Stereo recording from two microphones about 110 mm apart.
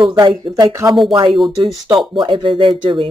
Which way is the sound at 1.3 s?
Centre (ahead or behind).